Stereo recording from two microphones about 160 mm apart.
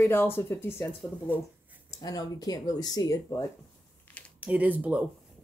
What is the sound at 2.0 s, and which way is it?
Speech, 25° left (ahead or behind).